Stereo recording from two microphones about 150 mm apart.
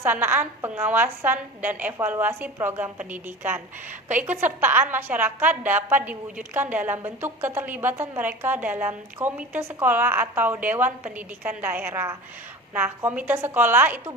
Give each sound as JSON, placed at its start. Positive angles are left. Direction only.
{"t": 0.0, "sound": "a woman's voice", "side_deg": -15}